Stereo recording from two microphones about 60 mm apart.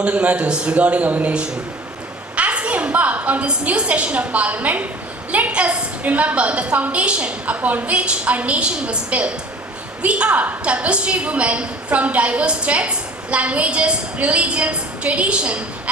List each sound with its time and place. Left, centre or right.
0.0 s a woman's voice: right